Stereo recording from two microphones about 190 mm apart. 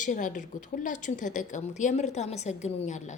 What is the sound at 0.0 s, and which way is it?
A woman's voice, 45° left (ahead or behind).